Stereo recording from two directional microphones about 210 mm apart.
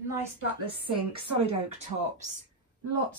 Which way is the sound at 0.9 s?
30° right (ahead or behind).